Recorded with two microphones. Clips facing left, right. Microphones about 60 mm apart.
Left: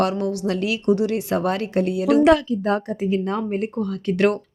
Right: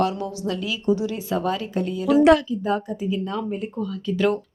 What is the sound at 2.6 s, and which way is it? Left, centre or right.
Speech, left.